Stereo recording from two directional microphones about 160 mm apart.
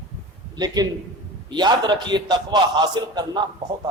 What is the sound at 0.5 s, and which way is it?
A man's voice, 25° right (ahead or behind).